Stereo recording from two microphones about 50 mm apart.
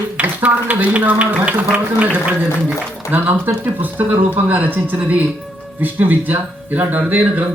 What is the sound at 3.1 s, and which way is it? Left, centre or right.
A man's voice, right.